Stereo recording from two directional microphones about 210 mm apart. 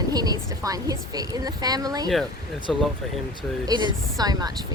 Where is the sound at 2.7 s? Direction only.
Centre (ahead or behind).